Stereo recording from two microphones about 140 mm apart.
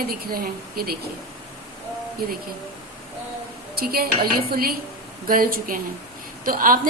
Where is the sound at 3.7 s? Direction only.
90° right.